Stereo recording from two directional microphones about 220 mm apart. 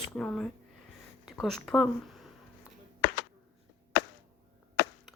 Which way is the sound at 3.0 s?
55° left (ahead or behind).